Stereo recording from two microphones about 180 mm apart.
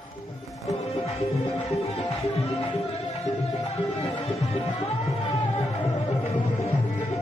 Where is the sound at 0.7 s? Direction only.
35° left (ahead or behind).